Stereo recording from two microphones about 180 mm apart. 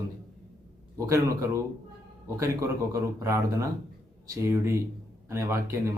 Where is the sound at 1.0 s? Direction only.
15° right (ahead or behind).